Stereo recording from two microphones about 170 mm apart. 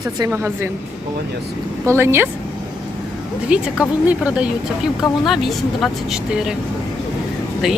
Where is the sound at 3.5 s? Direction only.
10° right (ahead or behind).